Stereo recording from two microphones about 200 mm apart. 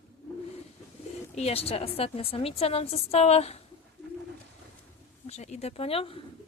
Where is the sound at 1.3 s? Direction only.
30° left (ahead or behind).